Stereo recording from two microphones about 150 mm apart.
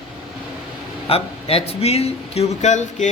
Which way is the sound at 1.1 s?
40° left (ahead or behind).